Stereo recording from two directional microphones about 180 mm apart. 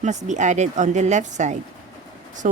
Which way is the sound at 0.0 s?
40° right (ahead or behind).